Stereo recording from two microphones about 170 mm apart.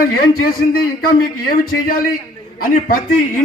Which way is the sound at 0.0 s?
60° left (ahead or behind).